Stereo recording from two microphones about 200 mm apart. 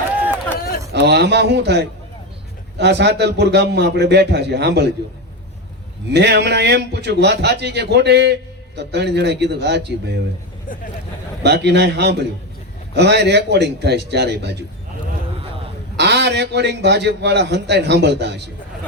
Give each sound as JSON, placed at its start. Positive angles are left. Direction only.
{"t": 0.9, "sound": "a man's voice", "side_deg": -55}
{"t": 6.1, "sound": "a man's voice", "side_deg": -55}
{"t": 10.7, "sound": "speech", "side_deg": 40}
{"t": 11.4, "sound": "a man's voice", "side_deg": -55}
{"t": 16.0, "sound": "a man's voice", "side_deg": -60}